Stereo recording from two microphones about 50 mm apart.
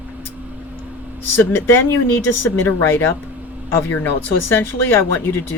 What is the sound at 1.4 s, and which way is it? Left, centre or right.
Speech, left.